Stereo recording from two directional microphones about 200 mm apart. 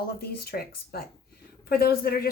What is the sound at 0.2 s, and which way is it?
A woman's voice, 50° left (ahead or behind).